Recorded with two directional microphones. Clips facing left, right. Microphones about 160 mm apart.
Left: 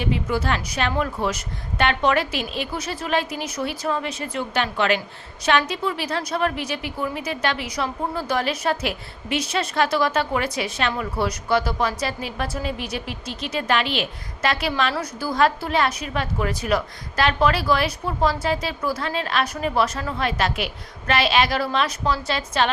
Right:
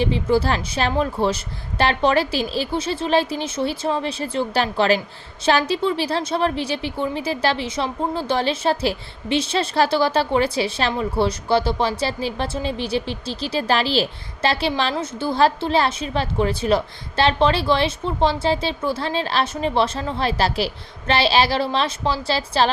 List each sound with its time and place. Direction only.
0.0 s a woman's voice: 30° right (ahead or behind)